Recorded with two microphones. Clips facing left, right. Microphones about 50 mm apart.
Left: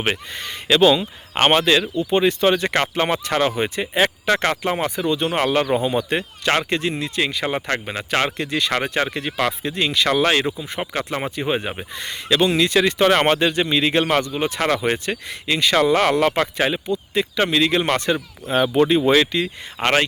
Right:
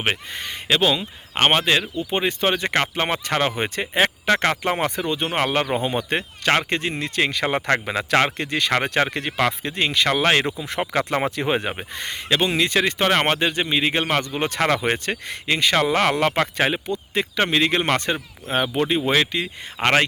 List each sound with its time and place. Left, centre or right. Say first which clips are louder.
0.0 s speech: left 1 dB; right
0.8 s speech: left 6 dB; centre
2.1 s speech: left 5 dB; right
5.0 s speech: left 3 dB; right
7.9 s speech: right 3 dB; right
8.2 s speech: even; right
9.5 s speech: left 1 dB; right
10.2 s speech: even; right
10.6 s speech: right 2 dB; right
11.7 s speech: even; right
14.3 s speech: even; right
18.6 s speech: left 6 dB; centre
19.8 s speech: even; right